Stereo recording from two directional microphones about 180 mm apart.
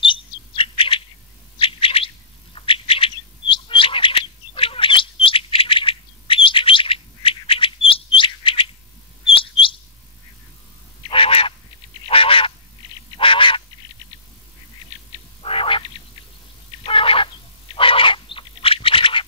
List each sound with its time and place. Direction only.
0.0 s bird: 30° left (ahead or behind)
11.1 s quack: 30° left (ahead or behind)
12.1 s goose: 30° left (ahead or behind)
13.2 s quack: 30° left (ahead or behind)
15.4 s frog: 30° left (ahead or behind)
16.8 s fowl: 30° left (ahead or behind)
17.7 s a sound: 30° left (ahead or behind)